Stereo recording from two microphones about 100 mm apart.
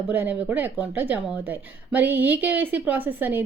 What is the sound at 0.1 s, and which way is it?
Speech, 20° right (ahead or behind).